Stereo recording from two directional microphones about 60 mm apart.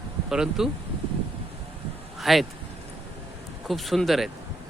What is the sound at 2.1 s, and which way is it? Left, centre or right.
Speech, centre.